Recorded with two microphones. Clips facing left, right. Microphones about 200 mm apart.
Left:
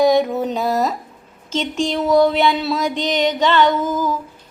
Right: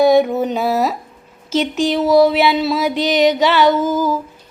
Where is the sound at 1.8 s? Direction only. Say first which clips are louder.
Right 2 dB; 5° right (ahead or behind).